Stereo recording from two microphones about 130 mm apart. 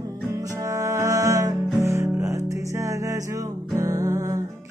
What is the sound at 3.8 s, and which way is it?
Music, 25° right (ahead or behind).